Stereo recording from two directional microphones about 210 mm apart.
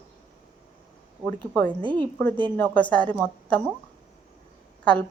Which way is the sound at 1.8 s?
25° right (ahead or behind).